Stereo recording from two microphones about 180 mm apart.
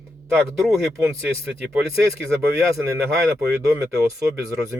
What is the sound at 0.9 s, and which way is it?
Speech, 15° right (ahead or behind).